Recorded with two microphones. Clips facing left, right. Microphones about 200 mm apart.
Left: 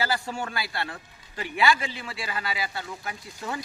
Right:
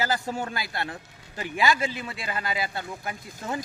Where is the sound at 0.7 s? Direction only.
20° right (ahead or behind).